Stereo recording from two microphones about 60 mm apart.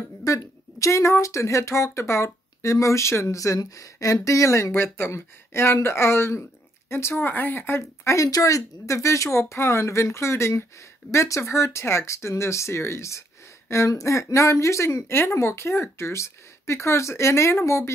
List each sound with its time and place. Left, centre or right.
0.2 s speech: left
4.7 s speech: left
8.0 s speech: left
8.3 s speech: left